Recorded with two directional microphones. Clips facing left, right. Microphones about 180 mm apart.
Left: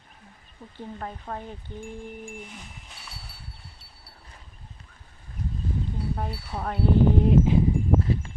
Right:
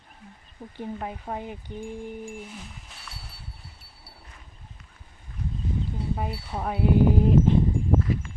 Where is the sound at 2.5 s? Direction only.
Centre (ahead or behind).